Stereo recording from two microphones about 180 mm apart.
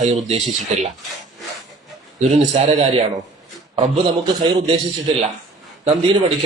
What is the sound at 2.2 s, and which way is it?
Speech, 40° right (ahead or behind).